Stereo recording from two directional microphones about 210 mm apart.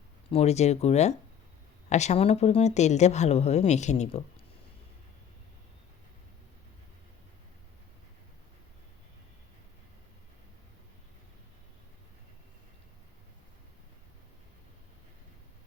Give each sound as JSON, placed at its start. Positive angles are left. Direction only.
{"t": 0.3, "sound": "speech", "side_deg": 30}